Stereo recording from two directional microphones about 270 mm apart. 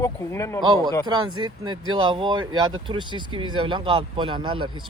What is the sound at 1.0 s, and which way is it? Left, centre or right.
Speech, centre.